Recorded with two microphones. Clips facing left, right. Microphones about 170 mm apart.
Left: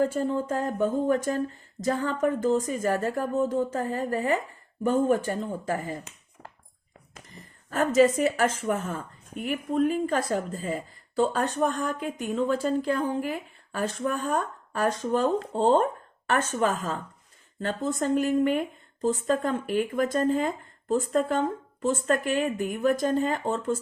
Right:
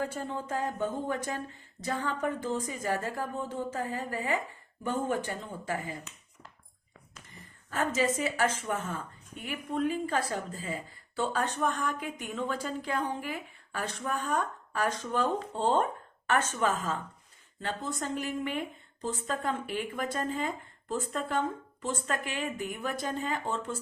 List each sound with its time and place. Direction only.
0.0 s speech: 45° left (ahead or behind)
6.4 s a sound: 60° left (ahead or behind)
8.2 s speech: 45° left (ahead or behind)